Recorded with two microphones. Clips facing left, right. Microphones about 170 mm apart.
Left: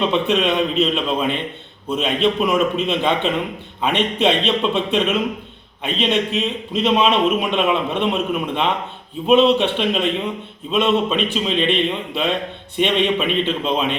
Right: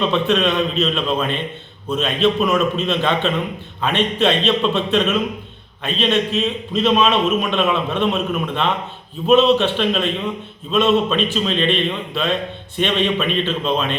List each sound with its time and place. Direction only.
0.1 s a man's voice: 15° left (ahead or behind)